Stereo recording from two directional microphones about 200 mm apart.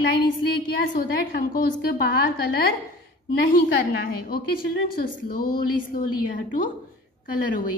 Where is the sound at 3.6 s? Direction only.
55° left (ahead or behind).